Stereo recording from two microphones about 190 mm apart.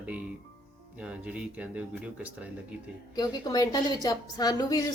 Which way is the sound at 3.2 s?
20° left (ahead or behind).